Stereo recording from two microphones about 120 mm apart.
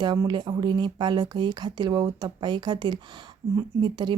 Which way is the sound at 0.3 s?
35° right (ahead or behind).